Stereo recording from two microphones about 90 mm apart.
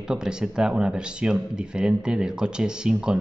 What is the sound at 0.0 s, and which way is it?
A man's voice, 10° right (ahead or behind).